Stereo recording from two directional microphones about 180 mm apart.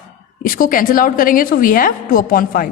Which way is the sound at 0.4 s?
50° left (ahead or behind).